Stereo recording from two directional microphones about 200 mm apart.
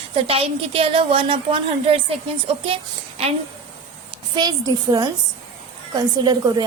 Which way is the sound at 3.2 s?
30° right (ahead or behind).